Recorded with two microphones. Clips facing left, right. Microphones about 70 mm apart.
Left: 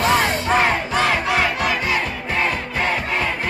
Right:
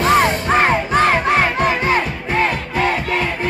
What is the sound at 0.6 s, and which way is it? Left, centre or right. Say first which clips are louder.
Crowd: right 5 dB; right.